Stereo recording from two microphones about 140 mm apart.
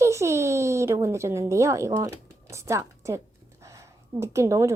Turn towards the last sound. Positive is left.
turn(degrees=-20)  # may be behind; listen again after turning